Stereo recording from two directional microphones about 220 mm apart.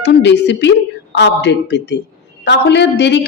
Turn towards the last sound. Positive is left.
turn(degrees=50)  # may be behind; listen again after turning